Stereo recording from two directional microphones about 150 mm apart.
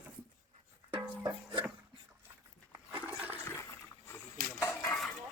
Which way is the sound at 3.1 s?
10° right (ahead or behind).